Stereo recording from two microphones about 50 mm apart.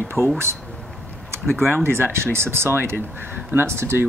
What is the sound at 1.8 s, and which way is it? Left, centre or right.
Speech, right.